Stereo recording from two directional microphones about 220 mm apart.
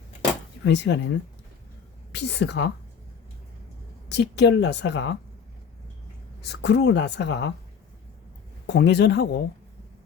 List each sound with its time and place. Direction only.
0.6 s speech: 55° left (ahead or behind)
2.1 s a woman's voice: 50° left (ahead or behind)
4.1 s a woman's voice: 50° left (ahead or behind)
6.4 s a woman's voice: 50° left (ahead or behind)
8.6 s a woman's voice: 50° left (ahead or behind)